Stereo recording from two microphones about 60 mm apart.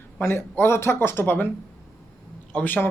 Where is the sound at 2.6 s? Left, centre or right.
Left.